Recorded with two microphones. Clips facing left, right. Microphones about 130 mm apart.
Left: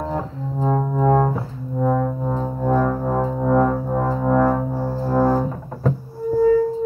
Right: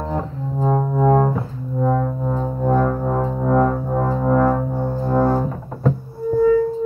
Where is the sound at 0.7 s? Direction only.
25° right (ahead or behind).